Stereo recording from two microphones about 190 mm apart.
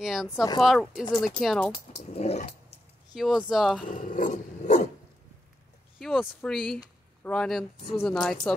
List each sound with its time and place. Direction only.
0.0 s speech: centre (ahead or behind)
1.9 s speech: 30° left (ahead or behind)
3.2 s speech: centre (ahead or behind)
3.8 s roar: 45° left (ahead or behind)
5.9 s speech: centre (ahead or behind)